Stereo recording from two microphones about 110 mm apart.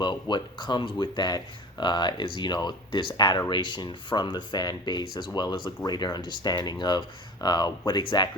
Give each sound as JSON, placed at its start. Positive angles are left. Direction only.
{"t": 0.0, "sound": "speech", "side_deg": 45}